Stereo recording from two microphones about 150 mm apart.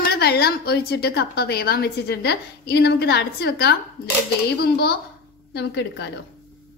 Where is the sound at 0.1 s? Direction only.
90° left.